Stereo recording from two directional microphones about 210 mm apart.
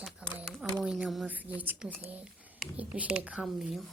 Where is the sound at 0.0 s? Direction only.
5° right (ahead or behind).